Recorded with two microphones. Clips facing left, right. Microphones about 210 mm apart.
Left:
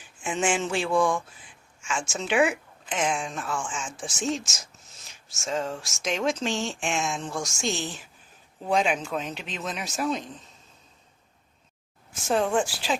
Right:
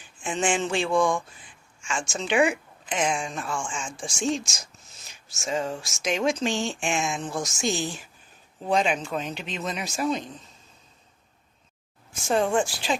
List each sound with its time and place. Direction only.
0.2 s a sound: 5° left (ahead or behind)
1.8 s speech: 5° left (ahead or behind)
12.1 s speech: centre (ahead or behind)